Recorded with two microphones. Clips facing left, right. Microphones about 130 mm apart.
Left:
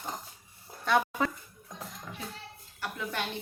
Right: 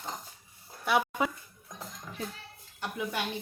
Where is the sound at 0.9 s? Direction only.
10° right (ahead or behind).